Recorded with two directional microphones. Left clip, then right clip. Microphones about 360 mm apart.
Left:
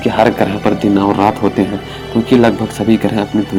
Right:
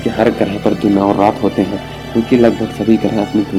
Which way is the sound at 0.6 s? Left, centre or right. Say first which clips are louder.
Right 2 dB; left.